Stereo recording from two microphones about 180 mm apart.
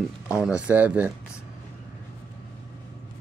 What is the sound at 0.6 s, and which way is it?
Speech, 10° right (ahead or behind).